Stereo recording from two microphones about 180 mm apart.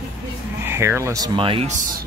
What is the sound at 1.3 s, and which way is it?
Speech, 30° right (ahead or behind).